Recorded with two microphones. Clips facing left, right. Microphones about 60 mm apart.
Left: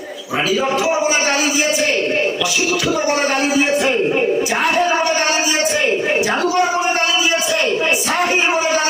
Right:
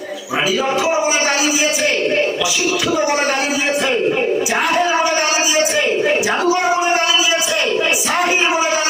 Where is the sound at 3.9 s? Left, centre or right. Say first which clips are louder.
Even; right.